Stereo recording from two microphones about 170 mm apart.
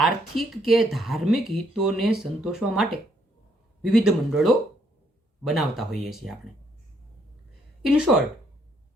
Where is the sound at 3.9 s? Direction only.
5° right (ahead or behind).